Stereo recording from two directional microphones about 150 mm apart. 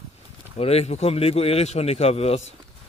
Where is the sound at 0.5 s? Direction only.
45° left (ahead or behind).